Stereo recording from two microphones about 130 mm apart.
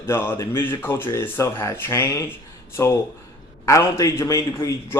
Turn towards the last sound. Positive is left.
turn(degrees=20)  # may be behind; listen again after turning